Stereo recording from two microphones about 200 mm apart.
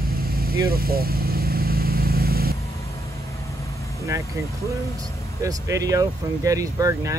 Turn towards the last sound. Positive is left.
turn(degrees=-15)  # may be behind; listen again after turning